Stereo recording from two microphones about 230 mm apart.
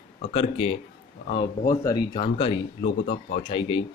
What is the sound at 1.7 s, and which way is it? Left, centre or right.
Speech, centre.